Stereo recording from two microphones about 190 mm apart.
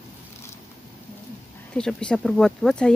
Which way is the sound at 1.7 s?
5° left (ahead or behind).